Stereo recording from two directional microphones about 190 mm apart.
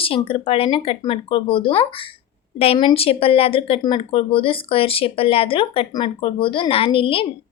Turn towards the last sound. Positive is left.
turn(degrees=30)  # may be behind; listen again after turning